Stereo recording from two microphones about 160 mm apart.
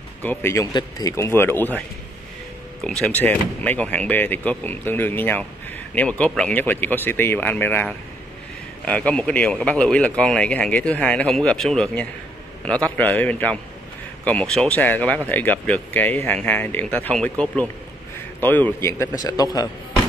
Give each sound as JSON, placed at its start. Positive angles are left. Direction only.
{"t": 0.2, "sound": "speech", "side_deg": 15}
{"t": 2.8, "sound": "a man's voice", "side_deg": 5}